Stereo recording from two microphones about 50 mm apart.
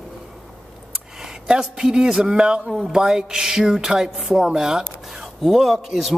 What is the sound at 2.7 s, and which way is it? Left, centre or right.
Speech, centre.